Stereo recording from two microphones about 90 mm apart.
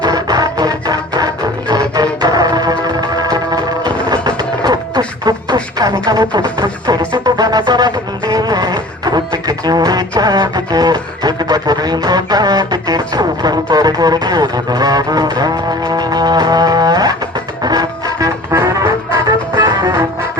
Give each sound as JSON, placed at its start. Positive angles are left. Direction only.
{"t": 0.0, "sound": "music", "side_deg": -50}
{"t": 18.6, "sound": "music", "side_deg": -30}
{"t": 19.5, "sound": "music", "side_deg": -50}